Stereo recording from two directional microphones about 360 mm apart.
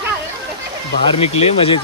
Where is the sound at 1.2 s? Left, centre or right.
Centre.